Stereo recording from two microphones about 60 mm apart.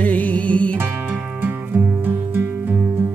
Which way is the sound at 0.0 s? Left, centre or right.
Left.